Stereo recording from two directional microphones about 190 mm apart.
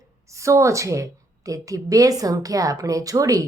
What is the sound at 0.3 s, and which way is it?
A woman's voice, 15° right (ahead or behind).